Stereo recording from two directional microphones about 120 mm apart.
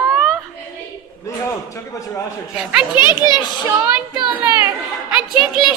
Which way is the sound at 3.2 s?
35° left (ahead or behind).